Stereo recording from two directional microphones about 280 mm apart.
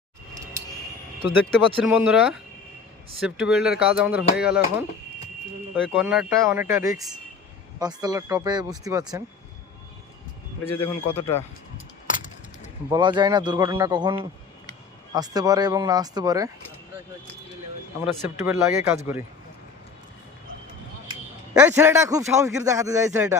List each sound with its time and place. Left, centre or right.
1.8 s speech: centre
5.9 s a man's voice: centre
10.8 s a man's voice: centre
12.0 s keys jangling: left
12.9 s a man's voice: centre
18.0 s a man's voice: centre
21.5 s a man's voice: centre